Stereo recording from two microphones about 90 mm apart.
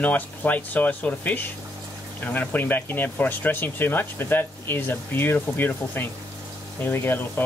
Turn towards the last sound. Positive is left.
turn(degrees=20)  # may be behind; listen again after turning